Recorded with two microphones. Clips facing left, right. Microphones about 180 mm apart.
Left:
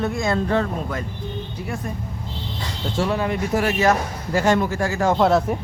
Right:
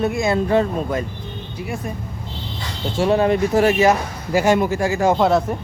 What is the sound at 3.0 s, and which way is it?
Speech, 25° right (ahead or behind).